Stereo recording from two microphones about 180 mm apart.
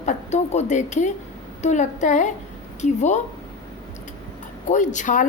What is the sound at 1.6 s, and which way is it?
A woman's voice, 40° left (ahead or behind).